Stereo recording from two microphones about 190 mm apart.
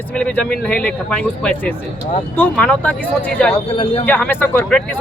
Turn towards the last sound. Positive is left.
turn(degrees=10)  # may be behind; listen again after turning